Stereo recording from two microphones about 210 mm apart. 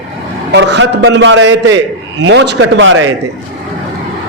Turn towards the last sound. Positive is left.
turn(degrees=-65)  # may be behind; listen again after turning